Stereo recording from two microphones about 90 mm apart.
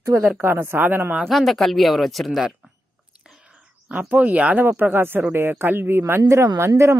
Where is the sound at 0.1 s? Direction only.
40° right (ahead or behind).